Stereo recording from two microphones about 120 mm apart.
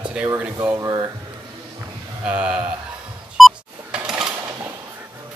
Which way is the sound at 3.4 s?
5° right (ahead or behind).